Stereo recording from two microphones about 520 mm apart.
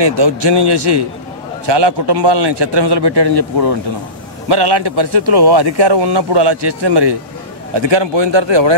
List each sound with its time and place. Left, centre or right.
0.0 s a man's voice: right